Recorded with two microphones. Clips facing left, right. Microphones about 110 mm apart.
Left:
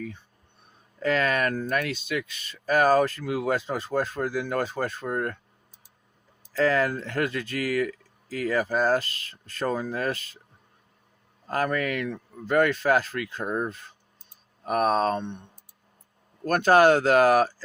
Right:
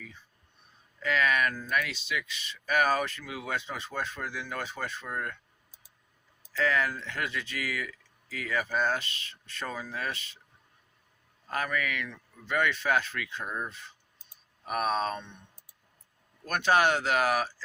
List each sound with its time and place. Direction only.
0.9 s speech: 40° left (ahead or behind)
6.5 s speech: 40° left (ahead or behind)
11.4 s speech: 35° left (ahead or behind)
15.2 s speech: 55° left (ahead or behind)
16.4 s speech: 45° left (ahead or behind)